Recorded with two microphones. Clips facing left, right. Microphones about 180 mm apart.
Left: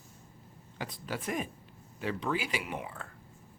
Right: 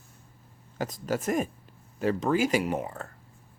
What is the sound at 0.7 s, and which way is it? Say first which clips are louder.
Speech: right 8 dB; 45° right (ahead or behind).